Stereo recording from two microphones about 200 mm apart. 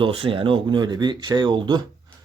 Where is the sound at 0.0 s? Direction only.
25° right (ahead or behind).